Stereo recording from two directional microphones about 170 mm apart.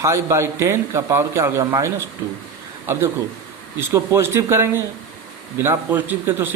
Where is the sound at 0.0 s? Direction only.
15° right (ahead or behind).